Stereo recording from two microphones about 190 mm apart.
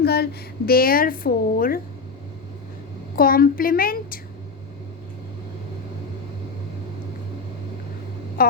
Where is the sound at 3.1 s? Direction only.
50° left (ahead or behind).